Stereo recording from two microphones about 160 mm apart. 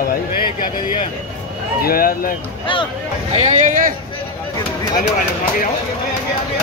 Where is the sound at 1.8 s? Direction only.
65° left (ahead or behind).